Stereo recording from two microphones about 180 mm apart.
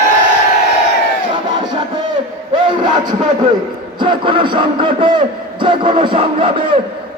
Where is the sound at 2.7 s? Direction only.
25° right (ahead or behind).